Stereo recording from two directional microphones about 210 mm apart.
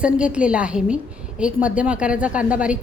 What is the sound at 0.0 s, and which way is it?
A woman's voice, 5° right (ahead or behind).